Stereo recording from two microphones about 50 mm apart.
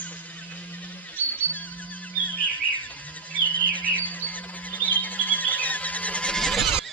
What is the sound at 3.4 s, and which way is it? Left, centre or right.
Bird, left.